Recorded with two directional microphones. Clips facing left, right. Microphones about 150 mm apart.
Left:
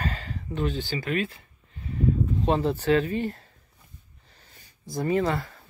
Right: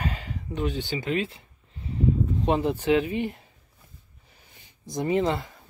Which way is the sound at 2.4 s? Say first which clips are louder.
Even; 15° right (ahead or behind).